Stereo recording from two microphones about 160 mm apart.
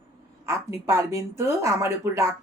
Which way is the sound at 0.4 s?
15° right (ahead or behind).